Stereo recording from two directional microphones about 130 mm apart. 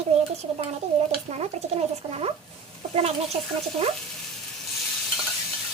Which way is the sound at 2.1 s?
50° right (ahead or behind).